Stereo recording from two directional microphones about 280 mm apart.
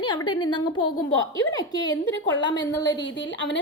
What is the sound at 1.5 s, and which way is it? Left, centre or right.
A woman's voice, centre.